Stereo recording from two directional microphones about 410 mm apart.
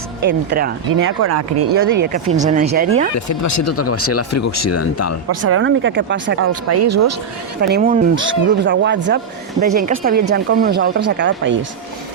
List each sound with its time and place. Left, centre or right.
0.3 s speech: right
2.0 s speech: centre
3.2 s speech: left
5.3 s speech: right
7.6 s speech: right